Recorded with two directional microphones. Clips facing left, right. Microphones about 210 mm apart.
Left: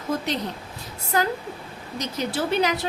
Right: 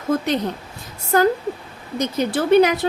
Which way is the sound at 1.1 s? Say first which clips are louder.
Right 8 dB; 50° right (ahead or behind).